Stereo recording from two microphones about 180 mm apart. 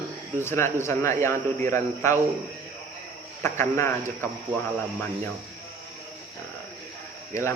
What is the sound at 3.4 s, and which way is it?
Speech, 15° left (ahead or behind).